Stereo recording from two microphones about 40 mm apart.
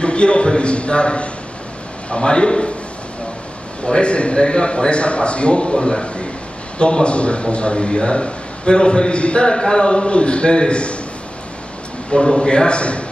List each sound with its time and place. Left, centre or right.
0.0 s a man's voice: left
3.8 s a man's voice: left
12.1 s a man's voice: centre